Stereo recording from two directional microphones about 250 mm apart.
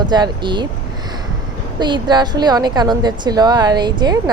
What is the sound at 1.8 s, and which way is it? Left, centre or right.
Speech, centre.